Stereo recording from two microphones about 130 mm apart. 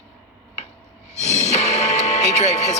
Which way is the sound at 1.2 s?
60° left (ahead or behind).